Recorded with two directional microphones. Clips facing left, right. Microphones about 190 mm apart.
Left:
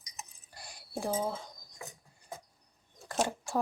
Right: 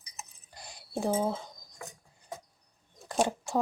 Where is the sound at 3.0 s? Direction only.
20° right (ahead or behind).